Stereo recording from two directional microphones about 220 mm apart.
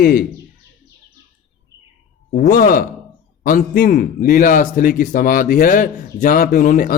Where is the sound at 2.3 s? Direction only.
40° left (ahead or behind).